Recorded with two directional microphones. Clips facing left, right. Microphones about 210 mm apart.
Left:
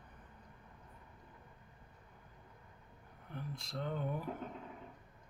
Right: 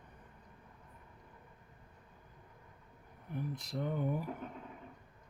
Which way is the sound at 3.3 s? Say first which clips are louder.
Right 5 dB; 15° right (ahead or behind).